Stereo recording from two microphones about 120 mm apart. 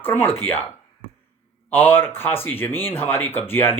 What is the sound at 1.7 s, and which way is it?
Speech, 15° left (ahead or behind).